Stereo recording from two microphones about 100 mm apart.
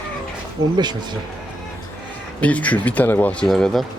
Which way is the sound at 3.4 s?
5° left (ahead or behind).